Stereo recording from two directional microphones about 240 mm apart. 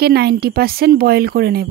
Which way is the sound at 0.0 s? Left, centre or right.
Right.